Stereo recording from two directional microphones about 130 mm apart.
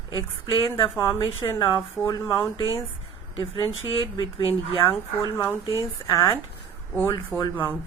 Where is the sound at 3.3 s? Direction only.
40° left (ahead or behind).